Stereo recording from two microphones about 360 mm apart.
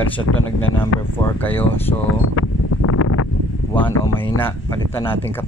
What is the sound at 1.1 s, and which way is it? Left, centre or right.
Speech, centre.